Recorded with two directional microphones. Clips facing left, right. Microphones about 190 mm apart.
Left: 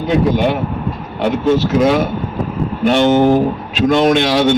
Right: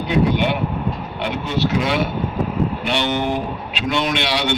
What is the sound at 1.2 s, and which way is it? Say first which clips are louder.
A man's voice: left 8 dB; 45° left (ahead or behind).